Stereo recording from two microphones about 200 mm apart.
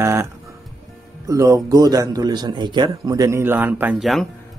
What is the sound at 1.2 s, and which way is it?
A man's voice, 15° right (ahead or behind).